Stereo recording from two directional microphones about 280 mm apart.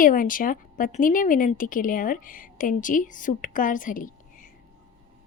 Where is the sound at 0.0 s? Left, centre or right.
Left.